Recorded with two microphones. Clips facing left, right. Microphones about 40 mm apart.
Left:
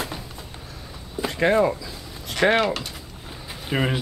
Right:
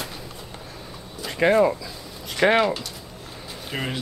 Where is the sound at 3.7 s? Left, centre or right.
Centre.